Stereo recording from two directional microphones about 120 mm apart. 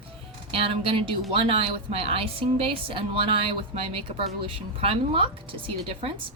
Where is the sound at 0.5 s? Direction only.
50° right (ahead or behind).